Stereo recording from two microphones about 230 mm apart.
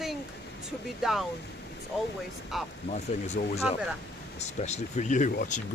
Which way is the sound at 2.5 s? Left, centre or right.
Centre.